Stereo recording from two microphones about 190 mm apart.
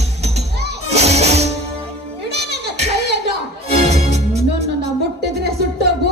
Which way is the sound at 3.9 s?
35° right (ahead or behind).